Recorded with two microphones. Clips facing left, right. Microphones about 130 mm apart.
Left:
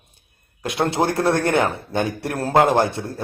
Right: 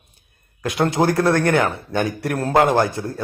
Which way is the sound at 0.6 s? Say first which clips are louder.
Right 2 dB; 25° left (ahead or behind).